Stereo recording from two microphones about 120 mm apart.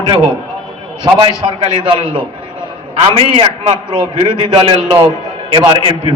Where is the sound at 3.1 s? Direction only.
50° right (ahead or behind).